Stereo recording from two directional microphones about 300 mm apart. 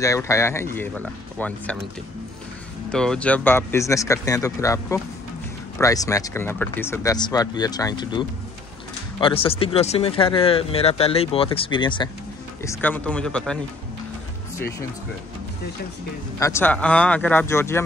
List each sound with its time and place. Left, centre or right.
0.0 s speech: centre
2.9 s speech: centre
16.3 s speech: centre